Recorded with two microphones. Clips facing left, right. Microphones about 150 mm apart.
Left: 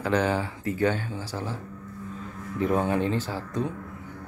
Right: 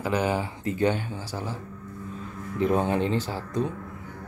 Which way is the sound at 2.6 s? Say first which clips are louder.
Right 1 dB; 20° right (ahead or behind).